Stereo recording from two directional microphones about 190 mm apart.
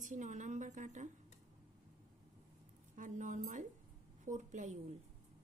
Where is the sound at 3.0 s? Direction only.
40° right (ahead or behind).